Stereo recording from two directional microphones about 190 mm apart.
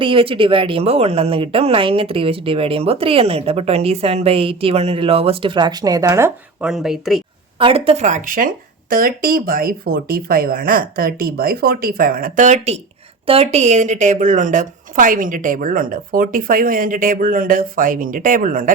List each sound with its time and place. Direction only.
0.0 s speech: 30° right (ahead or behind); by 7.2 s centre (ahead or behind)
7.6 s speech: 30° right (ahead or behind); by 18.7 s 45° right (ahead or behind)